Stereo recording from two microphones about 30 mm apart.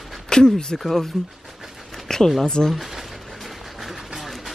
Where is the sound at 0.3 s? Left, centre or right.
Left.